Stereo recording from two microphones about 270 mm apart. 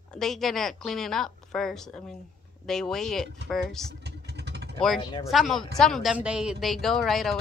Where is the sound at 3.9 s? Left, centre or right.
Right.